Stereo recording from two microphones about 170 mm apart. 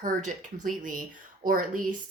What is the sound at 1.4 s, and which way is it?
Speech, 55° right (ahead or behind).